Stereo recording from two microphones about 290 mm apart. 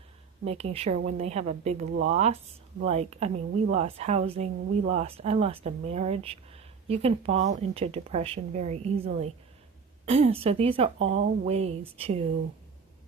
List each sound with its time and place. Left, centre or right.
0.4 s speech: right